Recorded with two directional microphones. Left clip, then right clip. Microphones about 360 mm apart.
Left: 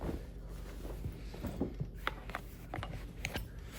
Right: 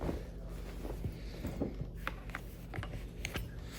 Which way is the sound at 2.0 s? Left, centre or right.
Left.